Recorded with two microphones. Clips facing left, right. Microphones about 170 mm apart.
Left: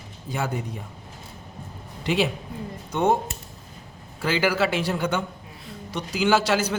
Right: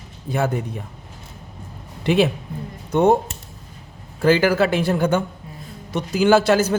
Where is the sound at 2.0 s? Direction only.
55° right (ahead or behind).